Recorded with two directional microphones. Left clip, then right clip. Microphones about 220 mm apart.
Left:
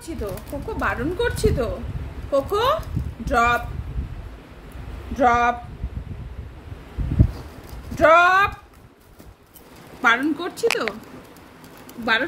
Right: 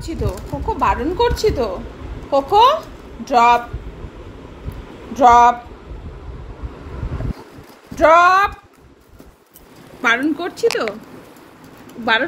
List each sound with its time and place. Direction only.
0.7 s a woman's voice: 15° left (ahead or behind)
5.1 s a woman's voice: 10° left (ahead or behind)
7.9 s speech: 15° left (ahead or behind)
10.0 s a woman's voice: 20° left (ahead or behind)
12.0 s a woman's voice: 15° left (ahead or behind)